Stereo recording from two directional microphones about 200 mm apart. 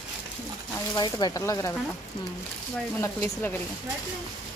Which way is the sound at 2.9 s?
10° left (ahead or behind).